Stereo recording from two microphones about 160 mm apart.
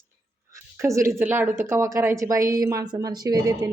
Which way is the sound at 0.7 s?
20° right (ahead or behind).